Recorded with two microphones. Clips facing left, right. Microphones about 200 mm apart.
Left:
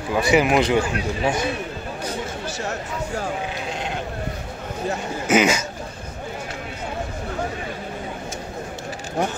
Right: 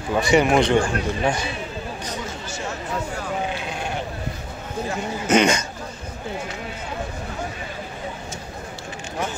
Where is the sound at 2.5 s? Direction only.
35° left (ahead or behind).